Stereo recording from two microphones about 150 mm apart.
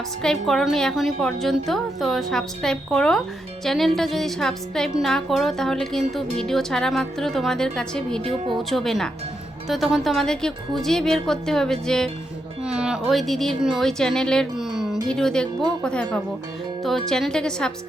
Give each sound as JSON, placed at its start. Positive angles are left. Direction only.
{"t": 0.2, "sound": "a woman's voice", "side_deg": 5}
{"t": 8.2, "sound": "speech", "side_deg": -40}
{"t": 8.7, "sound": "a woman's voice", "side_deg": 0}